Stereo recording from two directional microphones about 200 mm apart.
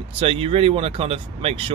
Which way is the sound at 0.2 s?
30° right (ahead or behind).